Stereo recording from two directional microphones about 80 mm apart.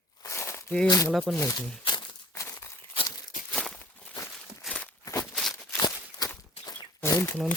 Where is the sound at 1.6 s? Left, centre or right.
Left.